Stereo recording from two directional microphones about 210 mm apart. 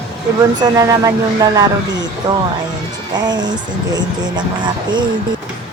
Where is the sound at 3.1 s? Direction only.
20° right (ahead or behind).